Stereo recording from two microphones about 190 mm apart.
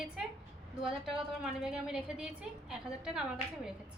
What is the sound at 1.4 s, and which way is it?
A woman's voice, 5° right (ahead or behind).